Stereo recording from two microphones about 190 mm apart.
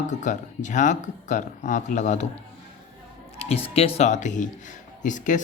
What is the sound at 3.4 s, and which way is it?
Speech, 30° left (ahead or behind).